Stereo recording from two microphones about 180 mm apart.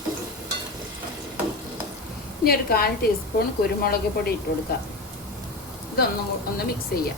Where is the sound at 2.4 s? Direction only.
55° left (ahead or behind).